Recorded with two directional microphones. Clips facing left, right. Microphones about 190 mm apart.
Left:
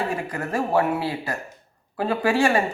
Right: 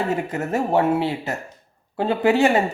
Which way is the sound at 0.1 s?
25° right (ahead or behind).